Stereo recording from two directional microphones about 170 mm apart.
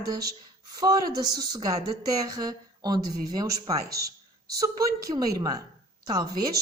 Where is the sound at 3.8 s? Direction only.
65° right (ahead or behind).